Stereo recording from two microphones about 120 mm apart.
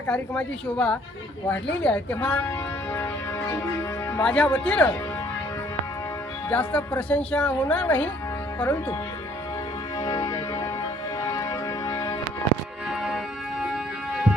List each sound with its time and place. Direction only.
0.1 s speech: 10° left (ahead or behind)
4.2 s speech: 10° left (ahead or behind)
6.5 s speech: 15° left (ahead or behind)
10.0 s music: 30° left (ahead or behind)
12.9 s music: 5° right (ahead or behind)